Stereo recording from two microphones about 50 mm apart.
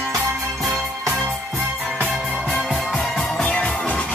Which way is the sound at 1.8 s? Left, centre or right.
Centre.